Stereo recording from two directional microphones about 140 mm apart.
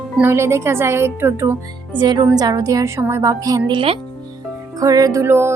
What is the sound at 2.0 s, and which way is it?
Speech, 30° right (ahead or behind).